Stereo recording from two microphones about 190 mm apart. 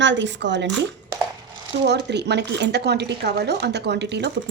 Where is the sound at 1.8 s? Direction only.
60° right (ahead or behind).